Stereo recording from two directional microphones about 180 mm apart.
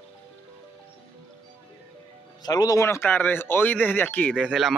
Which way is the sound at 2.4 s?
20° left (ahead or behind).